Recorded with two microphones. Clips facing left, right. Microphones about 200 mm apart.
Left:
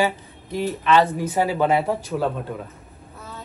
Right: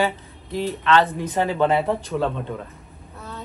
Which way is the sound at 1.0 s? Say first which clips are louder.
Left 1 dB; 5° left (ahead or behind).